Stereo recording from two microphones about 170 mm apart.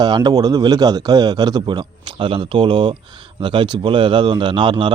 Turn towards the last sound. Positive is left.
turn(degrees=-25)  # may be behind; listen again after turning